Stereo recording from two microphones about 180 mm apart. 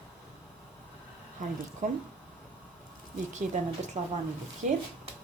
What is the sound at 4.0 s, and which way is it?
Speech, 35° right (ahead or behind).